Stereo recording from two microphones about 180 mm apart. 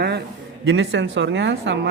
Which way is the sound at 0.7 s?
90° right.